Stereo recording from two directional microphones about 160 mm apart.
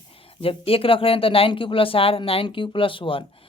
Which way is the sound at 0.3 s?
35° left (ahead or behind).